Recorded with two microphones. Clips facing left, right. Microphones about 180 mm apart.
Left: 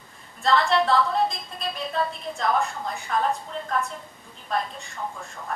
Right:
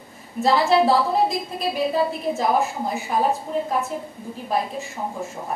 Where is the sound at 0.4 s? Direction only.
5° right (ahead or behind).